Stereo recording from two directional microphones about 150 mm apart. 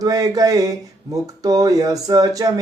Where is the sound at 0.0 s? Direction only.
25° right (ahead or behind).